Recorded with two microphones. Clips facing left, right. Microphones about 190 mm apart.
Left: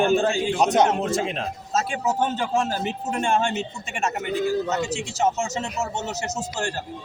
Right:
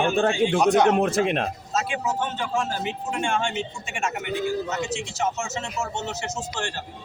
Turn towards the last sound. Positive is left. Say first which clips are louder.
# left 2 dB
turn(degrees=40)  # may be behind; listen again after turning